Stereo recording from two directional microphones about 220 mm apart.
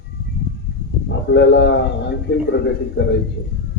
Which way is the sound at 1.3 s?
50° left (ahead or behind).